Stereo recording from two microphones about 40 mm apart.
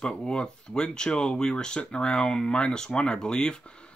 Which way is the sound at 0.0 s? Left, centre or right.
Left.